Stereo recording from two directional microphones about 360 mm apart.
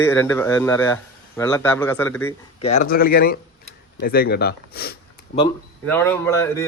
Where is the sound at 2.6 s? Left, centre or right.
Centre.